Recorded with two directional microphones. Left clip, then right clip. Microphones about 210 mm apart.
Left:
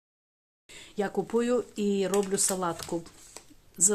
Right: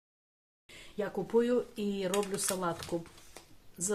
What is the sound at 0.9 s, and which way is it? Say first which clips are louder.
Speech: left 2 dB; 50° left (ahead or behind).